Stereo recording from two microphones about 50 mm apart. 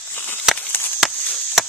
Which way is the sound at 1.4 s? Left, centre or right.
Centre.